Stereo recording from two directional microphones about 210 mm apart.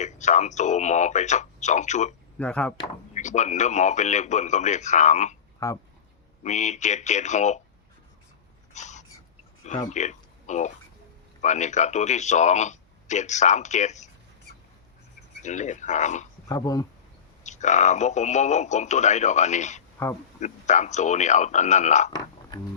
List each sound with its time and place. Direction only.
0.0 s a man's voice: 35° left (ahead or behind)
2.4 s speech: 5° left (ahead or behind)
3.2 s a man's voice: 35° left (ahead or behind)
5.5 s speech: 15° left (ahead or behind)
6.4 s a man's voice: 35° left (ahead or behind)
8.7 s a sound: 35° left (ahead or behind)
9.9 s a man's voice: 35° left (ahead or behind)
15.4 s a man's voice: 35° left (ahead or behind)
16.5 s speech: 15° left (ahead or behind)
17.4 s a man's voice: 35° left (ahead or behind)
22.1 s a sound: 20° left (ahead or behind)